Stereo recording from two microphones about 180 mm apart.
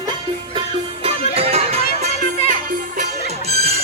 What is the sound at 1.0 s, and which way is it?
Music, 35° right (ahead or behind).